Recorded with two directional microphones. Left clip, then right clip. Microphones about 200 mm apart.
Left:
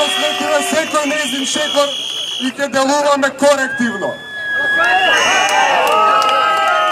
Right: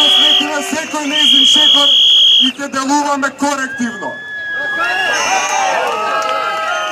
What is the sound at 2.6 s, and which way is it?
A man's voice, 25° left (ahead or behind).